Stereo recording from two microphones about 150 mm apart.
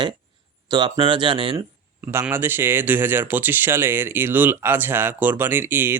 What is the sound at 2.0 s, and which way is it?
Speech, 15° right (ahead or behind).